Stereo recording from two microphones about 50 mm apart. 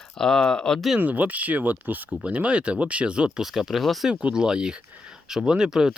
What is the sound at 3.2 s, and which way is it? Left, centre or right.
Speech, centre.